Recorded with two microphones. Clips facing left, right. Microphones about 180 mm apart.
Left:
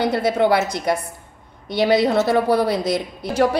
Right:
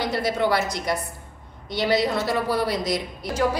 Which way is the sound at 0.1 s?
55° left (ahead or behind).